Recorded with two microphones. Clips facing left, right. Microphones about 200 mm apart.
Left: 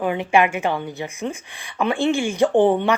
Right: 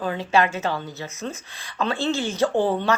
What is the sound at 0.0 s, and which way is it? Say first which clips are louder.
A woman's voice: left 3 dB; 15° left (ahead or behind).